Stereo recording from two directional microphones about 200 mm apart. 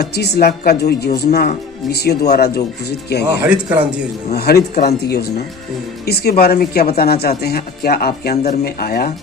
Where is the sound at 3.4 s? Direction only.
5° right (ahead or behind).